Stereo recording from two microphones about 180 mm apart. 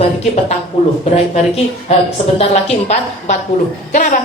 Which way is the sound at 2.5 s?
35° left (ahead or behind).